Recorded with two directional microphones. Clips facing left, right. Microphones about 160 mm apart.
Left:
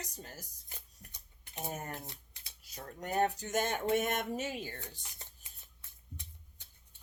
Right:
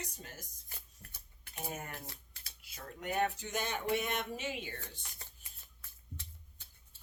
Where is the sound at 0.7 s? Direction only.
20° left (ahead or behind).